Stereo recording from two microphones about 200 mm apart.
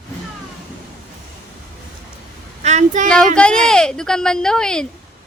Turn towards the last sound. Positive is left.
turn(degrees=5)  # may be behind; listen again after turning